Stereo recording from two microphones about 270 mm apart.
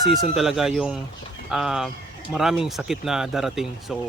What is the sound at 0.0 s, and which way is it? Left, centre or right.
A man's voice, centre.